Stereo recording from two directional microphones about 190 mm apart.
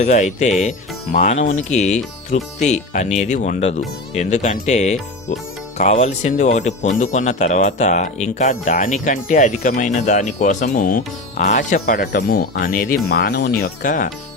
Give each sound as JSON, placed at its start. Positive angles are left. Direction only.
{"t": 0.0, "sound": "speech", "side_deg": 40}
{"t": 11.9, "sound": "speech", "side_deg": 55}